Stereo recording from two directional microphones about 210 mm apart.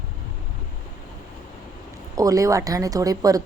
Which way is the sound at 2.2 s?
15° right (ahead or behind).